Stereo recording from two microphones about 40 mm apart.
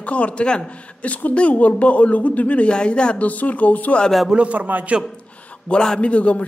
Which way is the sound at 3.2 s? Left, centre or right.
Left.